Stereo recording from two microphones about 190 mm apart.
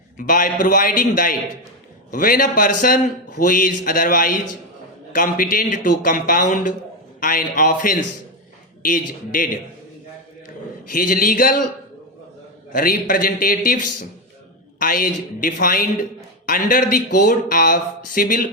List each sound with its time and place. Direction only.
0.3 s a man's voice: 45° left (ahead or behind)
10.9 s a man's voice: 50° left (ahead or behind)
12.7 s a man's voice: 50° left (ahead or behind)
14.8 s a man's voice: 50° left (ahead or behind)